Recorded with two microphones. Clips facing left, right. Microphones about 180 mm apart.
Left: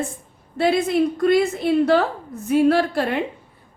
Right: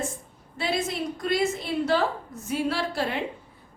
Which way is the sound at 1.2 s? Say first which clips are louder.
Left 8 dB; 55° left (ahead or behind).